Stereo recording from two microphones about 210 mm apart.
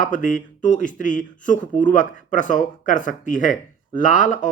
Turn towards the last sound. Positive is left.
turn(degrees=35)  # may be behind; listen again after turning